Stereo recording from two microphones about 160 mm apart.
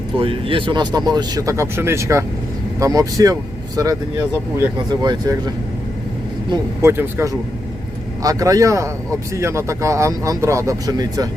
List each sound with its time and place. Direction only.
0.2 s speech: 35° right (ahead or behind)
6.8 s speech: 15° right (ahead or behind)